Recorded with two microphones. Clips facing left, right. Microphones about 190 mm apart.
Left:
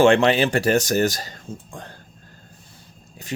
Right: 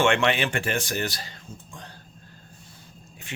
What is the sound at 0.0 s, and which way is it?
Speech, 35° left (ahead or behind).